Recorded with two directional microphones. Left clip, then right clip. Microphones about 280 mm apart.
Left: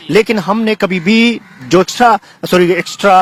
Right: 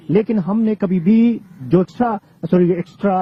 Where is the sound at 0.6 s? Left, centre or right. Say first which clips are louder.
Left 6 dB; centre.